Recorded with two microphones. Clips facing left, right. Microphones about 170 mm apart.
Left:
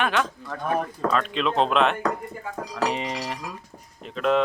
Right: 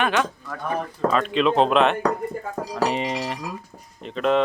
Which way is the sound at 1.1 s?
Centre (ahead or behind).